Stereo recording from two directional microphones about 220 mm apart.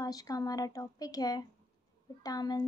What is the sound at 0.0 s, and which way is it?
A woman's voice, 15° left (ahead or behind).